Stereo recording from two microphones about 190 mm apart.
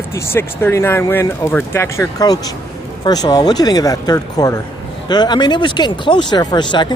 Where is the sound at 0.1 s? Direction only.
10° left (ahead or behind).